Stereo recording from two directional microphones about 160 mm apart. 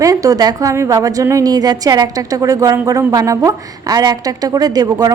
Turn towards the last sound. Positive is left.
turn(degrees=-25)  # may be behind; listen again after turning